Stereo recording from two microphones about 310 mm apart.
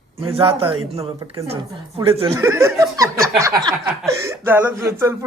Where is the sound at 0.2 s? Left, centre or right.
Centre.